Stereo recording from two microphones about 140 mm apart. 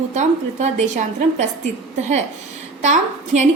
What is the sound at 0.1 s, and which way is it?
A woman's voice, 55° right (ahead or behind).